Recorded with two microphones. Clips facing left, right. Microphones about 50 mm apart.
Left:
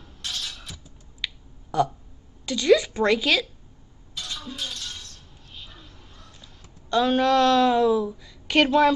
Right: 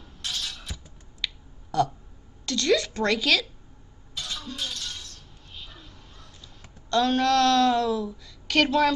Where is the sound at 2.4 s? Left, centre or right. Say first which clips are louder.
Left 4 dB; centre.